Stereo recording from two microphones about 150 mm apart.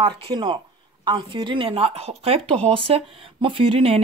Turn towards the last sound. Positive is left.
turn(degrees=-35)  # may be behind; listen again after turning